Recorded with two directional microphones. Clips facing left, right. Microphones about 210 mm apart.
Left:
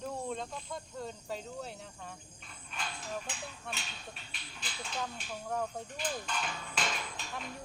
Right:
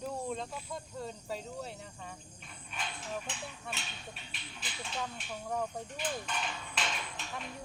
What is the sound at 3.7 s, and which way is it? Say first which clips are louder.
Speech: even; centre (ahead or behind).